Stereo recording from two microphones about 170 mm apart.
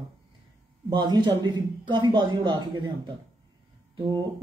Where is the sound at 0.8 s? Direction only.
25° right (ahead or behind).